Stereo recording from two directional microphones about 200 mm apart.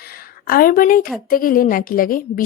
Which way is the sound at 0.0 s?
50° left (ahead or behind).